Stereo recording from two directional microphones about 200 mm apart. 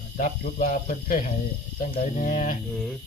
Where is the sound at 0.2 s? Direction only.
40° left (ahead or behind).